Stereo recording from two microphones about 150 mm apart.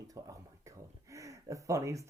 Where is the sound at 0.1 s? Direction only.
20° right (ahead or behind).